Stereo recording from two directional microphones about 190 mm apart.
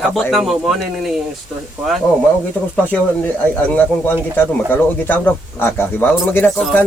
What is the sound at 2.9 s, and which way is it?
A man's voice, 5° left (ahead or behind).